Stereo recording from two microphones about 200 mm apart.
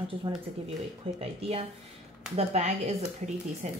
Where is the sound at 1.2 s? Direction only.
30° right (ahead or behind).